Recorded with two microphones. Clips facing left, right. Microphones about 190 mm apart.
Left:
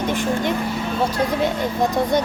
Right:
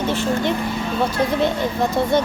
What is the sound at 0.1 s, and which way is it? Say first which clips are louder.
Speech: right 1 dB; 15° left (ahead or behind).